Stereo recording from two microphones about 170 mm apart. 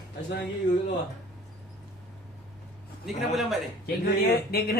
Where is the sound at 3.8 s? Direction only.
65° left (ahead or behind).